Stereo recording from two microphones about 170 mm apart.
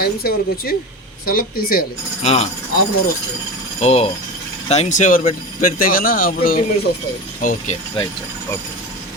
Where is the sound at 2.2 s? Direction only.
35° left (ahead or behind).